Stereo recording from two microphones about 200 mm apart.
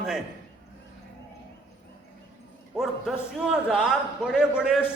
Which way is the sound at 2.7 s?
Centre (ahead or behind).